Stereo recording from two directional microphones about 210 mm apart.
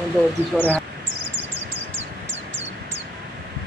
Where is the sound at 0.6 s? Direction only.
10° left (ahead or behind).